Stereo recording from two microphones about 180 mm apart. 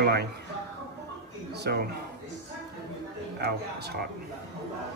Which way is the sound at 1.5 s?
65° right (ahead or behind).